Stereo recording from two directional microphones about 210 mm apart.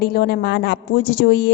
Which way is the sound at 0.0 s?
50° left (ahead or behind).